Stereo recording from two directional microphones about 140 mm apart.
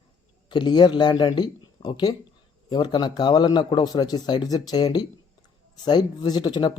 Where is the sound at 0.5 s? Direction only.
30° left (ahead or behind).